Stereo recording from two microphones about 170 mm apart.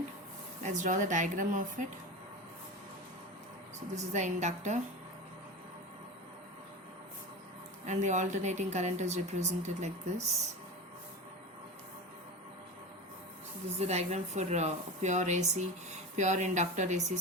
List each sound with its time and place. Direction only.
0.6 s a woman's voice: 45° right (ahead or behind)
3.9 s a woman's voice: 45° right (ahead or behind)
7.9 s a woman's voice: 45° right (ahead or behind)
13.7 s a woman's voice: 40° right (ahead or behind)